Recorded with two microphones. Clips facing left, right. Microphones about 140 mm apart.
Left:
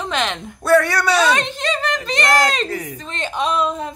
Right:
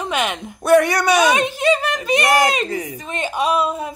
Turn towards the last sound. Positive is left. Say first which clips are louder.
# right 1 dB
turn(degrees=-10)  # may be behind; listen again after turning